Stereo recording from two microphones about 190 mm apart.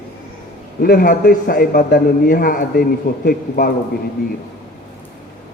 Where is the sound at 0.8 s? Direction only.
50° left (ahead or behind).